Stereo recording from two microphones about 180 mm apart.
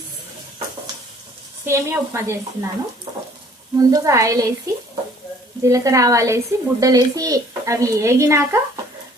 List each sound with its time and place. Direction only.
1.6 s speech: 15° right (ahead or behind)
3.8 s a woman's voice: 20° right (ahead or behind)